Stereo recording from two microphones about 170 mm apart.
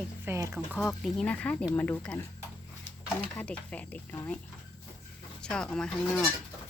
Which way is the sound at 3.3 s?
10° left (ahead or behind).